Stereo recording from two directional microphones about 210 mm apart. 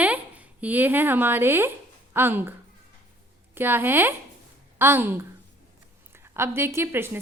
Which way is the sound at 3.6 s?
10° right (ahead or behind).